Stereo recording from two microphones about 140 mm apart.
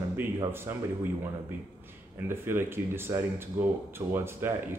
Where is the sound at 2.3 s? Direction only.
15° right (ahead or behind).